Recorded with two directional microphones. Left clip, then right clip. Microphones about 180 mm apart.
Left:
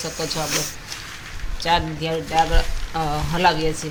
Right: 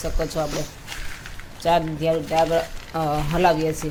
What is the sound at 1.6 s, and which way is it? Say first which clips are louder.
Speech: even; 55° right (ahead or behind).